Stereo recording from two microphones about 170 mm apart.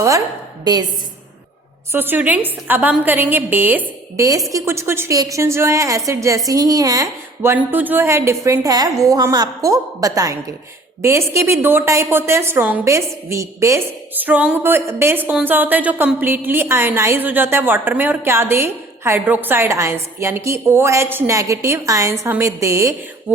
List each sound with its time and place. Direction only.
0.6 s a woman's voice: 25° right (ahead or behind)
1.9 s a woman's voice: 10° right (ahead or behind)